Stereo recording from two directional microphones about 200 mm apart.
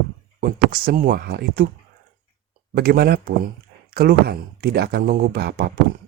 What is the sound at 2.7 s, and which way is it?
Speech, 50° right (ahead or behind).